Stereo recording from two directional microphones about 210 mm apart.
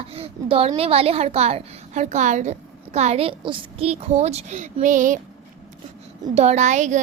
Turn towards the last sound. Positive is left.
turn(degrees=-35)  # may be behind; listen again after turning